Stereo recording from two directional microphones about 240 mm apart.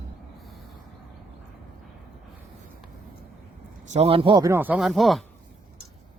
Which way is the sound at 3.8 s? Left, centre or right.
Right.